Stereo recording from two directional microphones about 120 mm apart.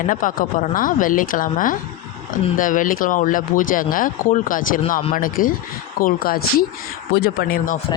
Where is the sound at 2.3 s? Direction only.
90° left.